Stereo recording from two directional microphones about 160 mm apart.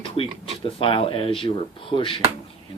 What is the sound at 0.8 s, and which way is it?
Speech, 35° left (ahead or behind).